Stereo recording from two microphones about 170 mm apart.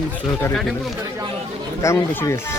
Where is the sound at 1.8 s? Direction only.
15° left (ahead or behind).